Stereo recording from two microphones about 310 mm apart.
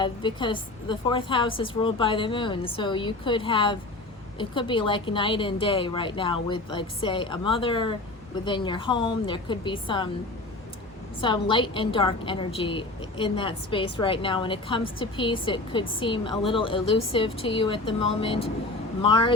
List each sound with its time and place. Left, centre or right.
0.0 s a woman's voice: centre
11.2 s a woman's voice: centre